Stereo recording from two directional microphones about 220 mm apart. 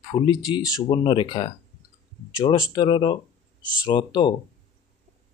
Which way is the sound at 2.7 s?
20° left (ahead or behind).